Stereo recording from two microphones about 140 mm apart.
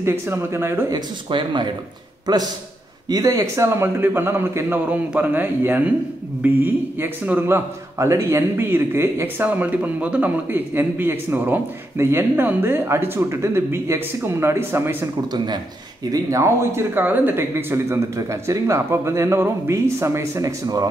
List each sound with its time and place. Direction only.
0.0 s speech: 20° right (ahead or behind)
1.3 s speech: 35° right (ahead or behind)
3.1 s a man's voice: 25° right (ahead or behind)
15.3 s speech: 30° right (ahead or behind)